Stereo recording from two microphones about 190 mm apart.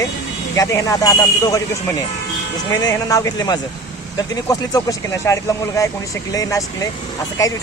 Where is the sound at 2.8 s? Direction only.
20° left (ahead or behind).